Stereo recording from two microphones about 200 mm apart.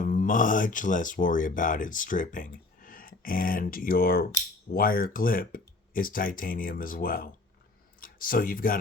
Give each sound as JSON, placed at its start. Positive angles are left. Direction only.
{"t": 0.0, "sound": "speech", "side_deg": 40}